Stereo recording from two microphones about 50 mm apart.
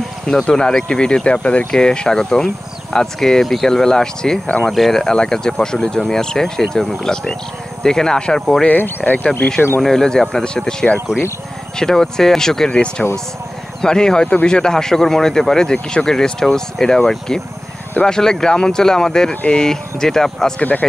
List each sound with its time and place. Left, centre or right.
0.3 s speech: centre
8.6 s speech: left
9.8 s speech: centre